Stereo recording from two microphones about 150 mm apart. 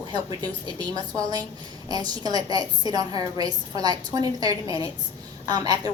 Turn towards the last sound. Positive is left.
turn(degrees=-25)  # may be behind; listen again after turning